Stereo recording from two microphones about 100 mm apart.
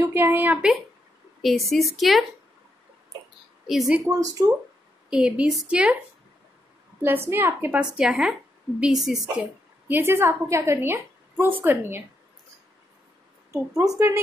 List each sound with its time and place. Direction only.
0.0 s a woman's voice: 25° right (ahead or behind)
1.7 s speech: centre (ahead or behind)
3.6 s speech: 5° right (ahead or behind)
4.0 s speech: 35° right (ahead or behind)
5.1 s a woman's voice: 5° right (ahead or behind)
7.0 s a woman's voice: 25° right (ahead or behind)
7.8 s speech: 10° right (ahead or behind)
9.4 s a woman's voice: 20° right (ahead or behind)
13.5 s a woman's voice: 30° right (ahead or behind)